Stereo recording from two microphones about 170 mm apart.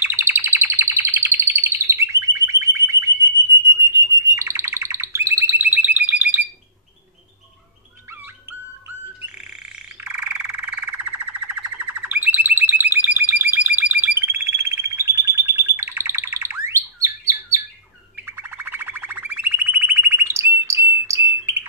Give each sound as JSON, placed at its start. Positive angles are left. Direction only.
{"t": 0.0, "sound": "chirp", "side_deg": -10}
{"t": 10.0, "sound": "frog", "side_deg": -10}
{"t": 18.1, "sound": "a sound", "side_deg": -15}